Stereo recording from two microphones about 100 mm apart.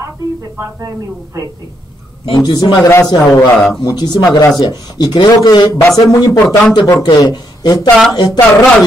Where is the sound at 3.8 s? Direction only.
45° left (ahead or behind).